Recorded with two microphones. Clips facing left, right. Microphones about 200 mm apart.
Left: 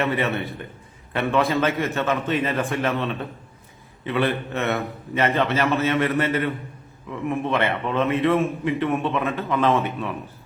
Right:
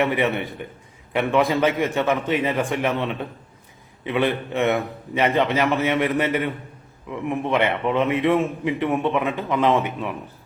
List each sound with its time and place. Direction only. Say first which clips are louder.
0.0 s a man's voice: right 2 dB; 15° right (ahead or behind)